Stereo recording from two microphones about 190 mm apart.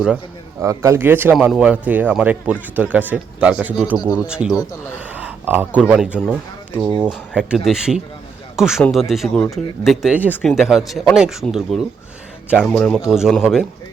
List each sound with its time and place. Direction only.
0.6 s speech: 15° right (ahead or behind)
6.7 s speech: 20° right (ahead or behind)
7.0 s a man's voice: 5° right (ahead or behind)